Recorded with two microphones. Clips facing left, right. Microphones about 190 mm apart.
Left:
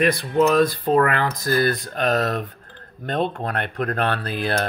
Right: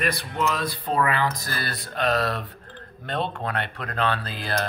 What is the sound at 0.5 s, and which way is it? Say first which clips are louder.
Speech: left 9 dB; 50° left (ahead or behind).